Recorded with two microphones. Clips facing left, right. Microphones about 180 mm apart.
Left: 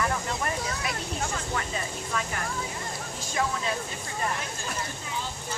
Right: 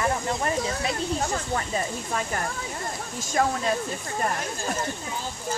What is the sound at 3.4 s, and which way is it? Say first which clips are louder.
Speech: right 5 dB; 50° right (ahead or behind).